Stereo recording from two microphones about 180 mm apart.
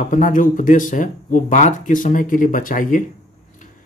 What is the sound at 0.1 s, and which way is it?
Speech, 45° left (ahead or behind).